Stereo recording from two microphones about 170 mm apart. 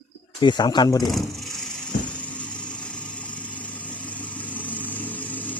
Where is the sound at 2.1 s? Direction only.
10° left (ahead or behind).